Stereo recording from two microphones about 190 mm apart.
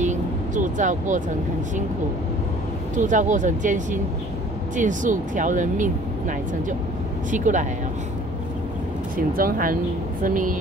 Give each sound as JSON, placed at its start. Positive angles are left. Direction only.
{"t": 0.0, "sound": "vehicle", "side_deg": -40}
{"t": 3.0, "sound": "speech", "side_deg": -40}
{"t": 9.1, "sound": "speech", "side_deg": -45}